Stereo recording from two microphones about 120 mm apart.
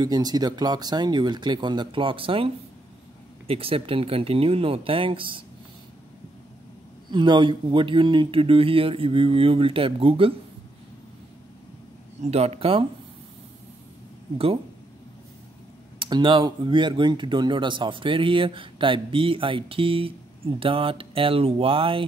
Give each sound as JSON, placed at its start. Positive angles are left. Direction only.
{"t": 0.0, "sound": "speech", "side_deg": -35}
{"t": 7.1, "sound": "speech", "side_deg": -40}
{"t": 12.2, "sound": "speech", "side_deg": -60}
{"t": 16.0, "sound": "speech", "side_deg": -40}